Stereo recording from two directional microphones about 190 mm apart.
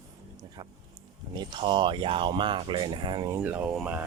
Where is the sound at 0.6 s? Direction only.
20° right (ahead or behind).